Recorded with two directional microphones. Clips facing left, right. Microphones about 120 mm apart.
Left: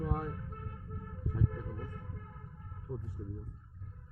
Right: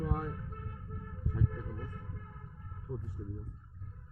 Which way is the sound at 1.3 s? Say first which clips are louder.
Left 1 dB; 15° left (ahead or behind).